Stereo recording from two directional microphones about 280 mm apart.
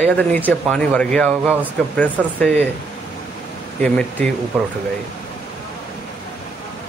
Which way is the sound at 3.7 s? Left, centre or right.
Centre.